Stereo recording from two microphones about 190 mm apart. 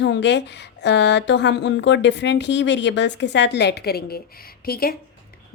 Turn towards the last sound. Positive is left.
turn(degrees=50)  # may be behind; listen again after turning